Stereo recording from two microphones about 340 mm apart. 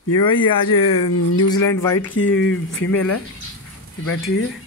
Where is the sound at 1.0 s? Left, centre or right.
Centre.